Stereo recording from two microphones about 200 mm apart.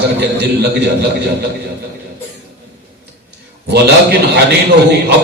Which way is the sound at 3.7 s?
55° right (ahead or behind).